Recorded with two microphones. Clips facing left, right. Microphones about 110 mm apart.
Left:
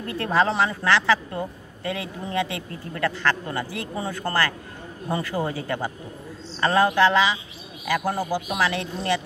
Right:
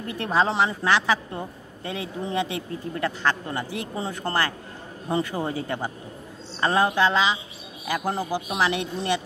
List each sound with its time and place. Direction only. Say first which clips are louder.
0.1 s a woman's voice: left 1 dB; 15° right (ahead or behind)